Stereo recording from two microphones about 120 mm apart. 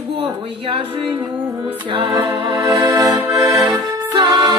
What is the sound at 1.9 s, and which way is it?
Music, 50° right (ahead or behind).